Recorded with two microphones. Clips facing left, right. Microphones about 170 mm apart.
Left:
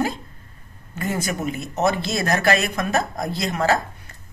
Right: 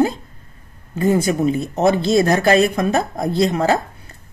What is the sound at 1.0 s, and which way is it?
Speech, 30° right (ahead or behind).